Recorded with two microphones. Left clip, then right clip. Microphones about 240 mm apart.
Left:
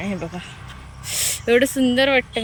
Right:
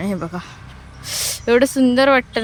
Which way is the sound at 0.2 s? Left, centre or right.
Centre.